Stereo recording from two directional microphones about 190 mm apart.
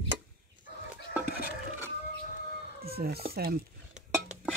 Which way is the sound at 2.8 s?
55° right (ahead or behind).